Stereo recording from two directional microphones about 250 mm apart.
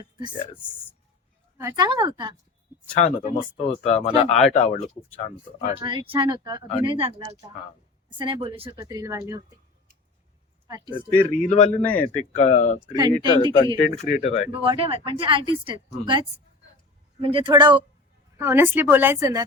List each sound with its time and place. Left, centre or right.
0.0 s speech: centre
1.5 s speech: centre
3.0 s speech: left
5.8 s speech: centre
8.2 s speech: right
10.7 s speech: centre
11.4 s speech: left
11.8 s speech: centre
12.2 s speech: left
12.8 s speech: centre
13.7 s speech: left
14.6 s speech: right